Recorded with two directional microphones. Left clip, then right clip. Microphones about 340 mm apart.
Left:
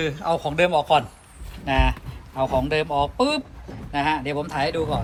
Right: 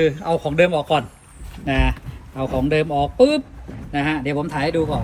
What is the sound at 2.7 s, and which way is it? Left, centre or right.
A man's voice, centre.